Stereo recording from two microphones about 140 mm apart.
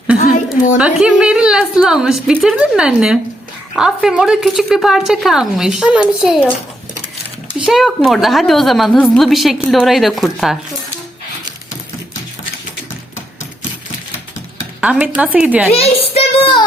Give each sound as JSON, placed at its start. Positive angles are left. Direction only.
{"t": 0.2, "sound": "a sound", "side_deg": 65}
{"t": 0.8, "sound": "a woman's voice", "side_deg": -5}
{"t": 7.6, "sound": "a woman's voice", "side_deg": 0}
{"t": 14.8, "sound": "a woman's voice", "side_deg": -10}
{"t": 15.7, "sound": "child singing", "side_deg": 45}